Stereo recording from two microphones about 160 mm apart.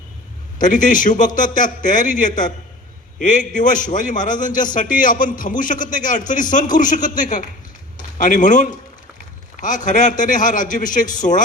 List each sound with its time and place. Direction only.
0.6 s a man's voice: 55° left (ahead or behind)